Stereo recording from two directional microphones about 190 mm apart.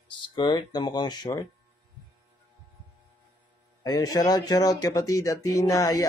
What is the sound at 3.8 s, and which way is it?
Speech, 20° left (ahead or behind).